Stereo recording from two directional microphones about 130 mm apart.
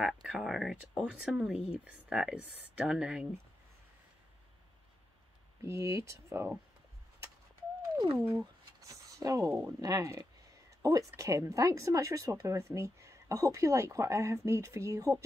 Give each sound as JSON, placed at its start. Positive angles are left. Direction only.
{"t": 0.0, "sound": "speech", "side_deg": -5}
{"t": 5.6, "sound": "speech", "side_deg": -20}
{"t": 8.2, "sound": "speech", "side_deg": -15}
{"t": 8.8, "sound": "speech", "side_deg": -25}